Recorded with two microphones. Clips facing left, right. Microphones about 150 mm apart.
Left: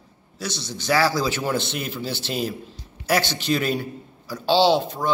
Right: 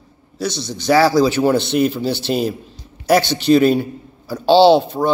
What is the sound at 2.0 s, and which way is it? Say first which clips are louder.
Speech: right 8 dB; 65° right (ahead or behind).